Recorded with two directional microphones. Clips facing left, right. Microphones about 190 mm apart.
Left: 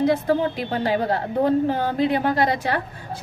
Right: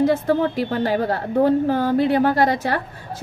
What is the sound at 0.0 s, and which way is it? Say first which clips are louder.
A woman's voice: right 2 dB; 45° right (ahead or behind).